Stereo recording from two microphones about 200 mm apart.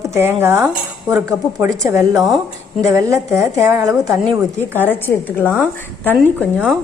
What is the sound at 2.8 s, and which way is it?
A woman's voice, 15° right (ahead or behind).